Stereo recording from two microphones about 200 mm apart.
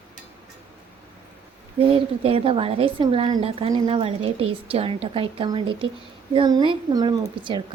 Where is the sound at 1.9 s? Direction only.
30° right (ahead or behind).